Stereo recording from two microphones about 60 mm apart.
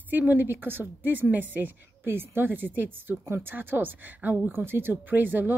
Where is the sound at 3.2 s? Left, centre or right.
Right.